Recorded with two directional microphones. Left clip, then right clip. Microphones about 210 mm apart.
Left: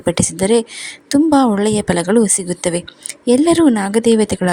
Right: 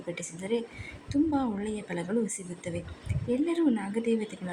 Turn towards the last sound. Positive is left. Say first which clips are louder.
# left 17 dB
turn(degrees=40)  # may be behind; listen again after turning